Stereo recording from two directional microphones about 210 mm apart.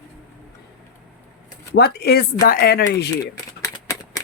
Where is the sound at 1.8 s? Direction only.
50° left (ahead or behind).